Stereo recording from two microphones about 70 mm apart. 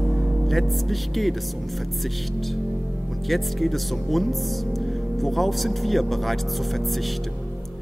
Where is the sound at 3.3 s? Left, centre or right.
Centre.